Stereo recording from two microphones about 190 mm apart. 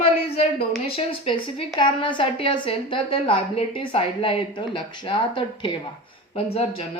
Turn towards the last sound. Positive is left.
turn(degrees=30)  # may be behind; listen again after turning